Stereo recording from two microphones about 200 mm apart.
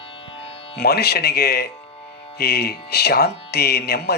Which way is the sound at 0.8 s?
55° left (ahead or behind).